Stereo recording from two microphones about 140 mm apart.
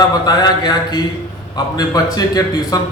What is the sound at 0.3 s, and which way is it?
A man's voice, 30° left (ahead or behind).